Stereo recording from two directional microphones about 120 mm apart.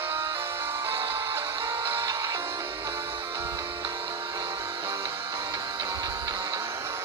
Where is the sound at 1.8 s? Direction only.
25° right (ahead or behind).